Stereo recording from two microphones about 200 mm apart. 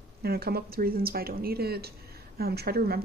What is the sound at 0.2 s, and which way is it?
Speech, 50° right (ahead or behind).